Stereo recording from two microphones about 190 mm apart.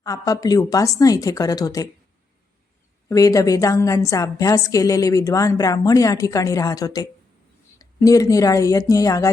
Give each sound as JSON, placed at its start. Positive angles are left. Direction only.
{"t": 0.0, "sound": "speech", "side_deg": 20}
{"t": 3.1, "sound": "a woman's voice", "side_deg": 15}